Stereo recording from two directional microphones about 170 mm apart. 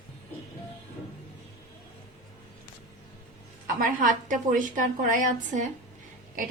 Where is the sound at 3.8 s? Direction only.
55° right (ahead or behind).